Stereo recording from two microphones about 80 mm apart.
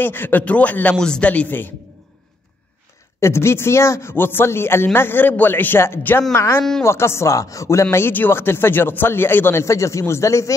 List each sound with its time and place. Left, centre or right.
0.0 s a man's voice: left
3.2 s a man's voice: left